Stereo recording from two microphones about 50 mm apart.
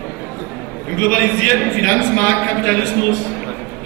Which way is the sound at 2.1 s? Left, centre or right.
Left.